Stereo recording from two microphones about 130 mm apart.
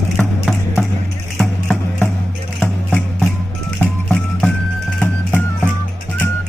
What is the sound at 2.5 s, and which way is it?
Music, 10° left (ahead or behind).